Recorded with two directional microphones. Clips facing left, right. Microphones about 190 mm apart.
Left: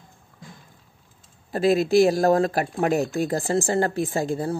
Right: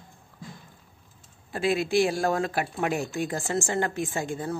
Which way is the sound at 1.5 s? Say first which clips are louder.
Left 6 dB; 40° left (ahead or behind).